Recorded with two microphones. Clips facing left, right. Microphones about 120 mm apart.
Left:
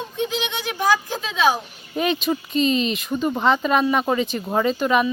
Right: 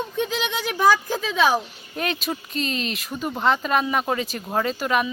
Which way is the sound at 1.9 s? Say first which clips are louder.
Left 5 dB; centre (ahead or behind).